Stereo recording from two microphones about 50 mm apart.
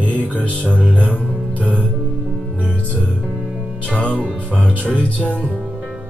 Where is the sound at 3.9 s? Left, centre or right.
Left.